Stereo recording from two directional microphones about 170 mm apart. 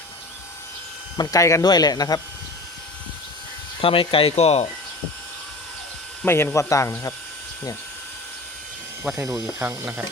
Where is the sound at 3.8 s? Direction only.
30° left (ahead or behind).